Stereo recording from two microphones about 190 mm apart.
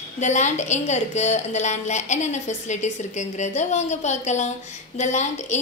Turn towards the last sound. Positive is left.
turn(degrees=40)  # may be behind; listen again after turning